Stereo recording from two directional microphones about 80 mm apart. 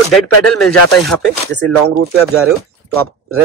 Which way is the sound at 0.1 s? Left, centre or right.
Centre.